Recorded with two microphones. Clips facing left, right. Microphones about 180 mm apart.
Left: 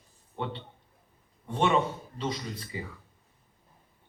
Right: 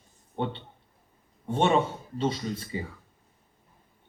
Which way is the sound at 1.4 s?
30° right (ahead or behind).